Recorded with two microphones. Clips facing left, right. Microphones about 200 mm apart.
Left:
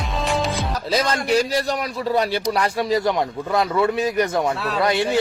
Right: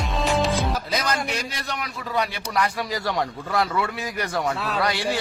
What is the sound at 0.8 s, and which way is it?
A man's voice, 30° left (ahead or behind).